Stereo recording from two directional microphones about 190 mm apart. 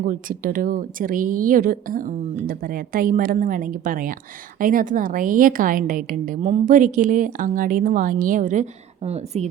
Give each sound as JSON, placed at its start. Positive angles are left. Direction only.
{"t": 0.0, "sound": "a woman's voice", "side_deg": -45}